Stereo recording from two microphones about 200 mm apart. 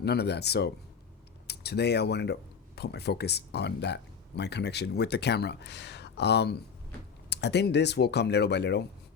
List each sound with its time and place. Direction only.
0.0 s speech: 55° left (ahead or behind)